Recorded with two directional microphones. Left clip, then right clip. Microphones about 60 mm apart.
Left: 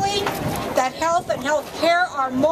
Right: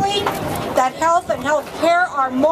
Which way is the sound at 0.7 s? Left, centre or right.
Left.